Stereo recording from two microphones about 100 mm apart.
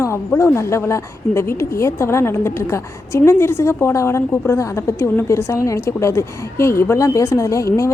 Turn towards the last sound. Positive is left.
turn(degrees=30)  # may be behind; listen again after turning